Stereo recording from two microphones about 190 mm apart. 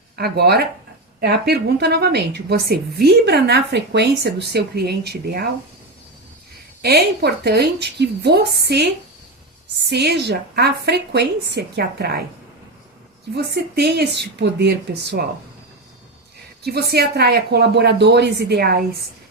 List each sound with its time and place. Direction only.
0.2 s a woman's voice: 55° right (ahead or behind)
6.8 s a woman's voice: 60° right (ahead or behind)
9.9 s a woman's voice: 60° right (ahead or behind)
13.3 s a woman's voice: 60° right (ahead or behind)
16.6 s a woman's voice: 60° right (ahead or behind)